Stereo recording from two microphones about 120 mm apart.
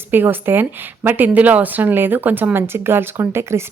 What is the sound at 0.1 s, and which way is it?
Speech, 15° right (ahead or behind).